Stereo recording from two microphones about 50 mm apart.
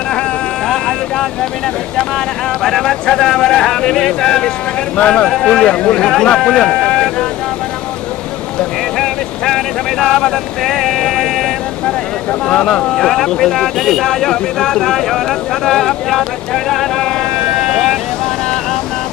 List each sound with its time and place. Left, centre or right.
0.7 s speech: centre
9.0 s speech: centre
16.6 s boat: centre